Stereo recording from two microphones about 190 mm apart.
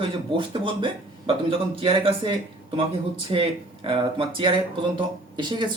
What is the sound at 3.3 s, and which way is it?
Speech, 25° right (ahead or behind).